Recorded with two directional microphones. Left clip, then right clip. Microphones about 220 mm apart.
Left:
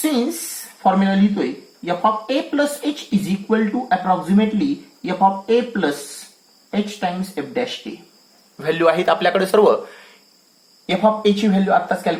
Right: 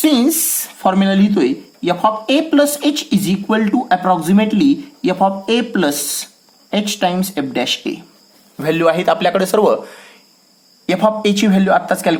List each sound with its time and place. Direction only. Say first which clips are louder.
0.0 s speech: right 7 dB; 35° right (ahead or behind)
7.0 s speech: right 6 dB; 35° right (ahead or behind)
8.5 s speech: right 2 dB; 25° right (ahead or behind)